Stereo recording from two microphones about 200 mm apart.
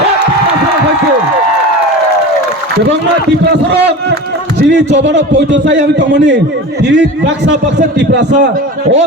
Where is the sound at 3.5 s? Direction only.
55° right (ahead or behind).